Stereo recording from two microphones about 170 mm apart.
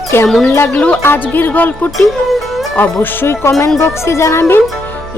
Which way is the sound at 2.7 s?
10° left (ahead or behind).